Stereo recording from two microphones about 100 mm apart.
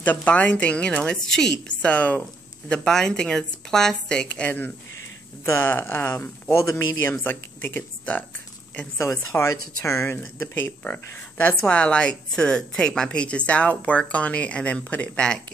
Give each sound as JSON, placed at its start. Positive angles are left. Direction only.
{"t": 0.0, "sound": "speech", "side_deg": 15}
{"t": 9.4, "sound": "speech", "side_deg": 20}